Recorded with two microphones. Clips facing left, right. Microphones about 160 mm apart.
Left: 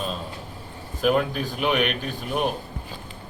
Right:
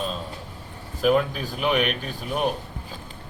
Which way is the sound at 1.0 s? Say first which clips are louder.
Right 1 dB; centre (ahead or behind).